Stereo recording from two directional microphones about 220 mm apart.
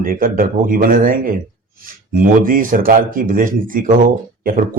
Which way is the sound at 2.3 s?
40° right (ahead or behind).